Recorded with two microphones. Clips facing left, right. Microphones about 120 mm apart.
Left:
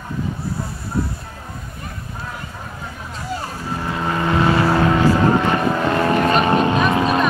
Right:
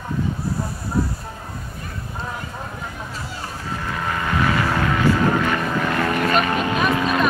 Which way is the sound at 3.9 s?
25° left (ahead or behind).